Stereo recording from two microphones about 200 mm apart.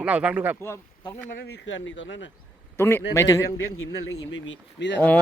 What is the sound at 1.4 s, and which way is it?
Speech, 70° left (ahead or behind).